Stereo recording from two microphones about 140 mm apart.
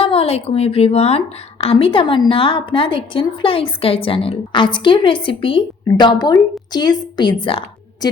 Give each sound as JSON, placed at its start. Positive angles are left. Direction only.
{"t": 0.0, "sound": "a woman's voice", "side_deg": 45}